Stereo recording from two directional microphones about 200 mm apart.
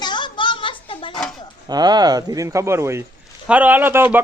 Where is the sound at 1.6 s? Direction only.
20° right (ahead or behind).